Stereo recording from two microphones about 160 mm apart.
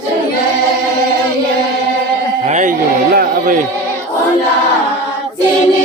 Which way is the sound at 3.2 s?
60° right (ahead or behind).